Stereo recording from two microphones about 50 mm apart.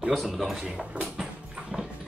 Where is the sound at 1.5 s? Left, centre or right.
Centre.